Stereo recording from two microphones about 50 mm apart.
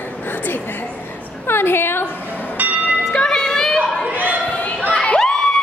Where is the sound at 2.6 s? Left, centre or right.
Right.